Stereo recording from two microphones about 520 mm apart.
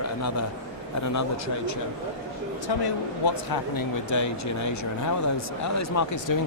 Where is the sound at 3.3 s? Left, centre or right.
Left.